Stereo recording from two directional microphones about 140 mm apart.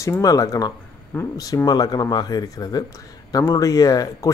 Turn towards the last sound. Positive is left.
turn(degrees=25)  # may be behind; listen again after turning